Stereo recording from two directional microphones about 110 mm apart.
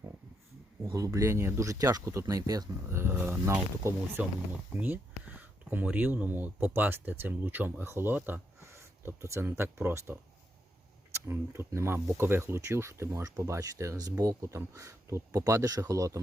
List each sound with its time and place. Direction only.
0.9 s speech: 30° right (ahead or behind)
3.0 s speech: 20° right (ahead or behind)